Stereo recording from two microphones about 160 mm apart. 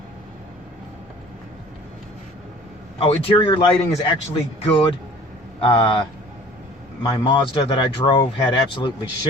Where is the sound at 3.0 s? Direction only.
35° left (ahead or behind).